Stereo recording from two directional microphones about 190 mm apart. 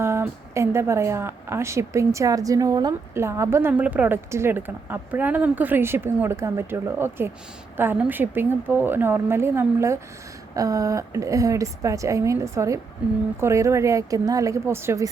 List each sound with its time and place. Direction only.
0.0 s speech: 15° right (ahead or behind)